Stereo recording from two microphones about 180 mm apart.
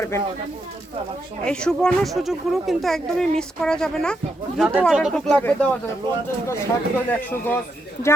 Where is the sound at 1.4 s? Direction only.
5° left (ahead or behind).